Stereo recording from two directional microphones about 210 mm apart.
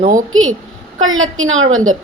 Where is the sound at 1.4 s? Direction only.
75° right (ahead or behind).